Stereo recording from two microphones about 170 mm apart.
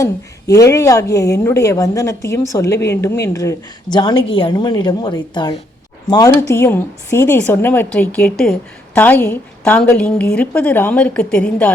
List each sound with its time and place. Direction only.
0.0 s a woman's voice: 20° left (ahead or behind)
6.5 s a woman's voice: 15° left (ahead or behind)